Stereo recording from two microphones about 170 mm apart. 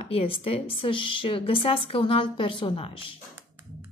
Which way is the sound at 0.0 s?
35° left (ahead or behind).